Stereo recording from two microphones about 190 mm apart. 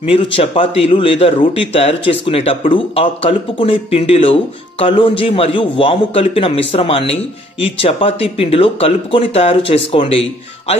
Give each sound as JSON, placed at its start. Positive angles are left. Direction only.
{"t": 0.0, "sound": "a man's voice", "side_deg": 30}